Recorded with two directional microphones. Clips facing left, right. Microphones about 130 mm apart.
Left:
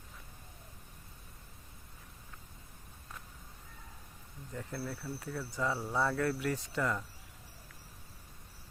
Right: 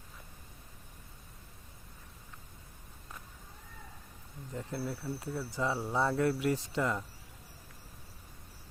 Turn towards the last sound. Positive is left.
turn(degrees=-20)  # may be behind; listen again after turning